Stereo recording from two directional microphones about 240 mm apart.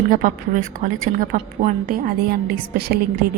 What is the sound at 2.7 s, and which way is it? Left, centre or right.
Speech, right.